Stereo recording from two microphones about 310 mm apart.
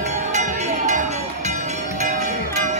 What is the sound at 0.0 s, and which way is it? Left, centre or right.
Music, right.